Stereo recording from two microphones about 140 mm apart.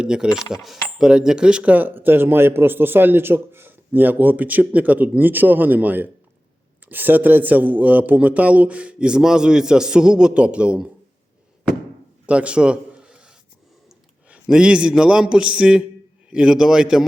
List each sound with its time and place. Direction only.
0.0 s a man's voice: 5° right (ahead or behind)
12.2 s a sound: 10° right (ahead or behind)
14.3 s a man's voice: 5° right (ahead or behind)